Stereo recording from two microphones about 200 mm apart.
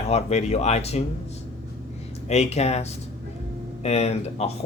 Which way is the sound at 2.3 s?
35° left (ahead or behind).